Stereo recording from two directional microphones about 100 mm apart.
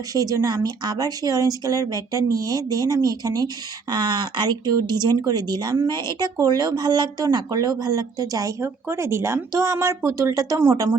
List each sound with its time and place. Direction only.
0.1 s speech: 35° right (ahead or behind)